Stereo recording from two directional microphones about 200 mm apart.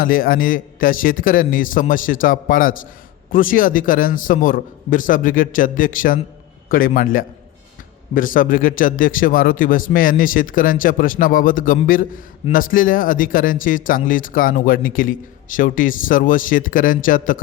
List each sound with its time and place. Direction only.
0.0 s a man's voice: 45° left (ahead or behind)